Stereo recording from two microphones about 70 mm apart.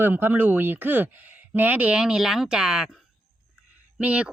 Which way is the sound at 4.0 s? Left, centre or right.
Centre.